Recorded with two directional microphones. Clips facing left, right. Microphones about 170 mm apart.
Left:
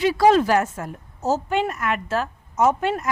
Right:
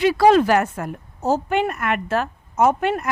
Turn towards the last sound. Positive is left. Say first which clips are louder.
# right 2 dB
turn(degrees=-60)  # may be behind; listen again after turning